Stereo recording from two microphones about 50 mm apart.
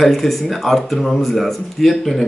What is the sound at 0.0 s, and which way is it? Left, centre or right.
Speech, centre.